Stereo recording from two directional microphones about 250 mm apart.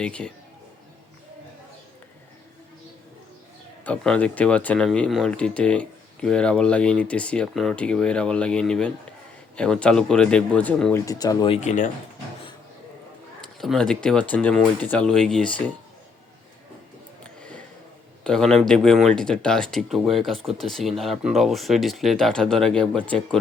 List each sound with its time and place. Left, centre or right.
0.0 s speech: centre
3.8 s speech: centre; by 11.9 s left
13.4 s speech: centre
18.2 s speech: centre